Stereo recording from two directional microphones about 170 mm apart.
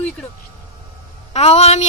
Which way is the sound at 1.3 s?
40° left (ahead or behind).